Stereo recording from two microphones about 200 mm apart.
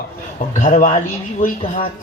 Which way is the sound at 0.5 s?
40° left (ahead or behind).